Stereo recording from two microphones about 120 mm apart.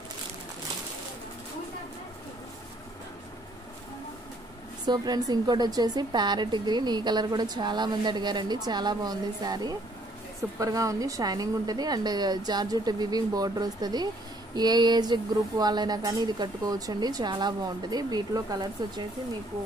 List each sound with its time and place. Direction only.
4.8 s a woman's voice: 35° right (ahead or behind)